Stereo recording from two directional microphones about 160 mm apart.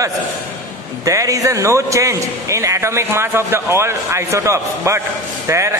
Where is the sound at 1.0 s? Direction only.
20° right (ahead or behind).